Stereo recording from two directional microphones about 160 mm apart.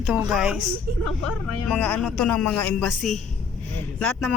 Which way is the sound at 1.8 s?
5° left (ahead or behind).